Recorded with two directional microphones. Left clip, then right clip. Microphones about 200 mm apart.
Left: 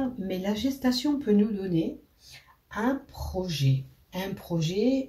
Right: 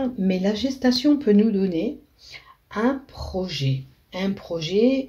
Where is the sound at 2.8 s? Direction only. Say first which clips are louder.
Right 5 dB; 45° right (ahead or behind).